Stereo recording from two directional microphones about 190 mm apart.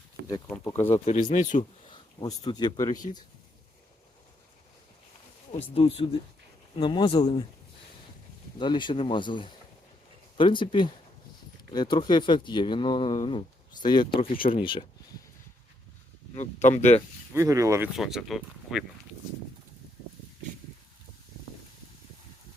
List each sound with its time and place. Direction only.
0.4 s speech: 5° left (ahead or behind)
0.9 s speech: 35° left (ahead or behind)
1.9 s speech: 20° left (ahead or behind)
5.7 s speech: 30° left (ahead or behind)
8.5 s speech: 25° left (ahead or behind)
16.4 s speech: 40° left (ahead or behind)
17.3 s speech: 15° right (ahead or behind)
17.9 s speech: centre (ahead or behind)